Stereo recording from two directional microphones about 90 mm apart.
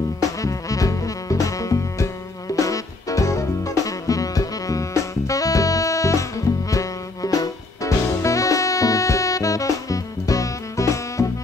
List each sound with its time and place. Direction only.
0.2 s music: 40° left (ahead or behind)